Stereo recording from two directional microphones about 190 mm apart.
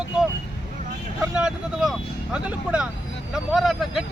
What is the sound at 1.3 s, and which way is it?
Speech, 5° right (ahead or behind).